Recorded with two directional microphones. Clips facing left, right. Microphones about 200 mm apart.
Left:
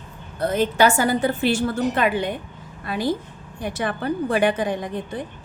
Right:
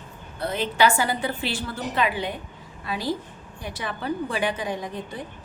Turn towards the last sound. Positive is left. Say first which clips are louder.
# left 4 dB
turn(degrees=55)  # may be behind; listen again after turning